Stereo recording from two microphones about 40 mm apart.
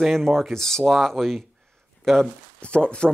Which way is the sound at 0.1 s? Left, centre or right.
Centre.